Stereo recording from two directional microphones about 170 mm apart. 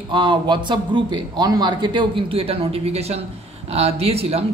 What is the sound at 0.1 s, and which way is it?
A man's voice, 30° right (ahead or behind).